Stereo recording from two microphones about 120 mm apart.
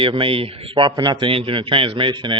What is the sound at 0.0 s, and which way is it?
Speech, 45° right (ahead or behind).